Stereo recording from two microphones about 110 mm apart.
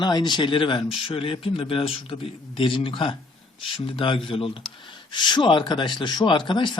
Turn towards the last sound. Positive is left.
turn(degrees=45)  # may be behind; listen again after turning